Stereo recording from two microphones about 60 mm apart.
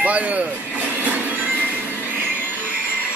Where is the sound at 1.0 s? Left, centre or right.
Right.